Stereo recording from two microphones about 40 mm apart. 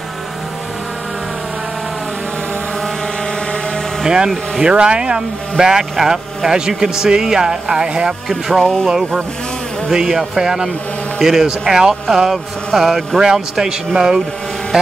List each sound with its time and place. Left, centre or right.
4.0 s speech: centre
8.3 s music: centre
8.8 s speech: centre